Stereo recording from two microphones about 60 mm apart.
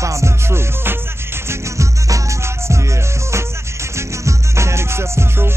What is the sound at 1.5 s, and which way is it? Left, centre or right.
Music, right.